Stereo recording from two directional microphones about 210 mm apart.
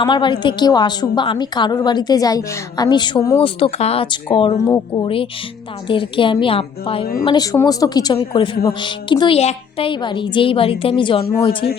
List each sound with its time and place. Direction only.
0.0 s a woman's voice: 20° left (ahead or behind)